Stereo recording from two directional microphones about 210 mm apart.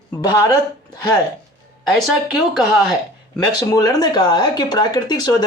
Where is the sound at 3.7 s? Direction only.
15° left (ahead or behind).